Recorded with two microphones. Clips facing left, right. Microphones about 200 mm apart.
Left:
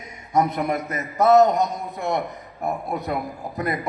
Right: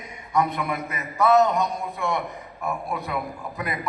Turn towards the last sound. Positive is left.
turn(degrees=40)  # may be behind; listen again after turning